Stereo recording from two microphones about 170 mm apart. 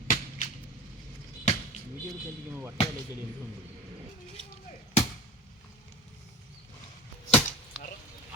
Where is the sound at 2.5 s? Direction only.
15° right (ahead or behind).